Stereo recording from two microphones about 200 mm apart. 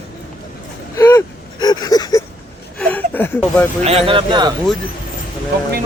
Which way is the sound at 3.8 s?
30° right (ahead or behind).